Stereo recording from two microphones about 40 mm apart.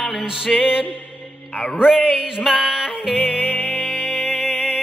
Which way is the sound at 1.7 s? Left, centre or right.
Centre.